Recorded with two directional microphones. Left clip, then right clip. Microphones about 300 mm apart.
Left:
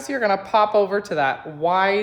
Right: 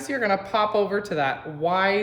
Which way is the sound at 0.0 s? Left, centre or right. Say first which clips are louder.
Left 3 dB; centre.